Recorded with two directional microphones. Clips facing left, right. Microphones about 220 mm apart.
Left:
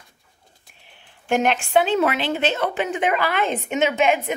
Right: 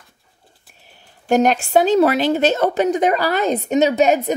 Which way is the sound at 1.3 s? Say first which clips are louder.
Right 4 dB; 40° right (ahead or behind).